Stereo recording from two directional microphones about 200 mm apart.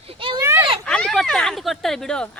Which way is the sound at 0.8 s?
5° left (ahead or behind).